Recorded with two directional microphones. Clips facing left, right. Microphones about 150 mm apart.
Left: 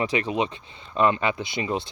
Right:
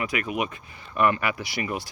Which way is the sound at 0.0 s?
30° left (ahead or behind).